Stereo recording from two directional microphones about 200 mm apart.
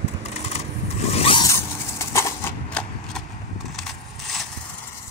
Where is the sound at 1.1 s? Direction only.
30° left (ahead or behind).